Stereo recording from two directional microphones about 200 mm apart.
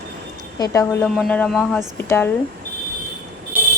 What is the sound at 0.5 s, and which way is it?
A woman's voice, 15° left (ahead or behind).